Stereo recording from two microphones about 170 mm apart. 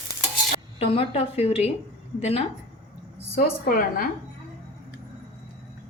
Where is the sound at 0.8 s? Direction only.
35° left (ahead or behind).